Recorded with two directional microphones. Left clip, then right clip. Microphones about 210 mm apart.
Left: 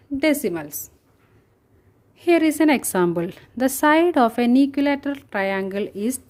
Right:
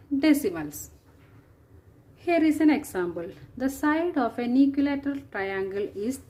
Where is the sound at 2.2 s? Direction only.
50° left (ahead or behind).